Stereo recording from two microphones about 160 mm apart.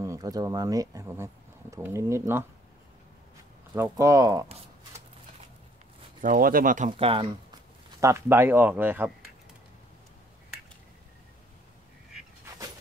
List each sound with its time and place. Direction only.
0.0 s speech: 20° right (ahead or behind)
3.7 s speech: 15° right (ahead or behind)
6.2 s speech: 60° right (ahead or behind)
6.9 s speech: 35° right (ahead or behind)
8.0 s speech: 15° right (ahead or behind)